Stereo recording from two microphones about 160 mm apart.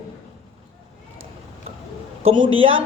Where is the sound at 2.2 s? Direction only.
35° right (ahead or behind).